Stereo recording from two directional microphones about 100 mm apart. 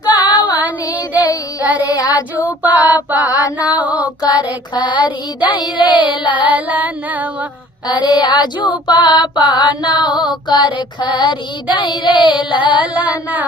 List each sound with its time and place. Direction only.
0.1 s child singing: 50° left (ahead or behind)
0.5 s child singing: 15° right (ahead or behind)
1.1 s child singing: 40° left (ahead or behind)
2.3 s female singing: 15° right (ahead or behind)
4.2 s mantra: 45° left (ahead or behind)
6.4 s female singing: 15° right (ahead or behind)
7.9 s mantra: 45° left (ahead or behind)